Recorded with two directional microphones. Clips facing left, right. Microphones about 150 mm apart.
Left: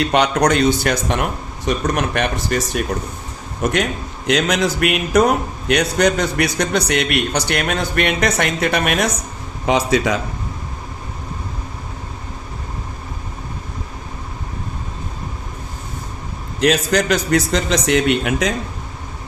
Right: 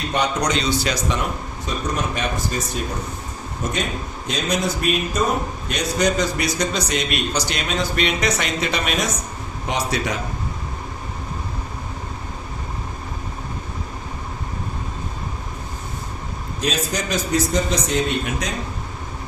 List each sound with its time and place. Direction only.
0.0 s a man's voice: 80° left
5.6 s a man's voice: 65° left (ahead or behind)
9.7 s a man's voice: 90° left
16.6 s a man's voice: 70° left (ahead or behind); by 18.5 s 90° left